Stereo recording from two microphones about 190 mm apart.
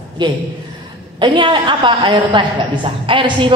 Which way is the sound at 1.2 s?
25° right (ahead or behind).